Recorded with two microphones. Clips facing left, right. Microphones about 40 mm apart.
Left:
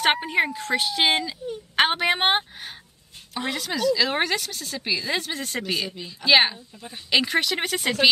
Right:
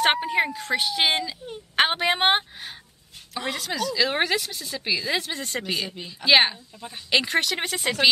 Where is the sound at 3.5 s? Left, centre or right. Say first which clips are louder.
Left 3 dB; centre.